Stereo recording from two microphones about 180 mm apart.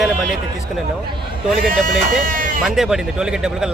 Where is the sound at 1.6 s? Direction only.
50° right (ahead or behind).